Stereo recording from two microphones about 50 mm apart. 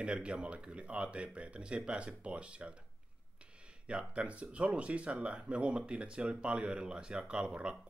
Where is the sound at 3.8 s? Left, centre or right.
Right.